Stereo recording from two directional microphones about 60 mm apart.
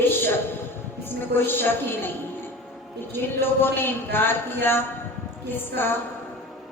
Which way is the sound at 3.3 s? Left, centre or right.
Left.